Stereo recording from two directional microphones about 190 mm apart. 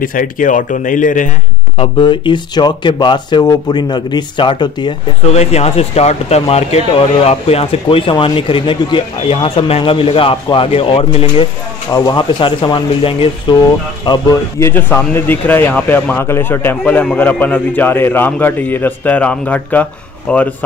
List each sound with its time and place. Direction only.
0.0 s speech: 45° left (ahead or behind)
1.8 s speech: 25° left (ahead or behind)
5.3 s speech: 35° left (ahead or behind); by 20.4 s 10° left (ahead or behind)